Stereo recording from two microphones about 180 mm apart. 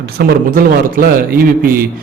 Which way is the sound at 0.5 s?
55° right (ahead or behind).